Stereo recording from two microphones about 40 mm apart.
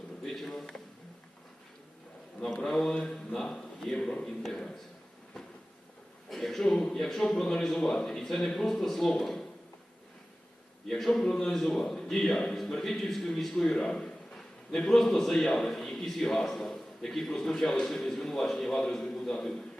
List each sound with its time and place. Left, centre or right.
0.2 s speech: centre
2.4 s a man's voice: centre
6.3 s a man's voice: centre
10.8 s a man's voice: centre
11.1 s a man's voice: centre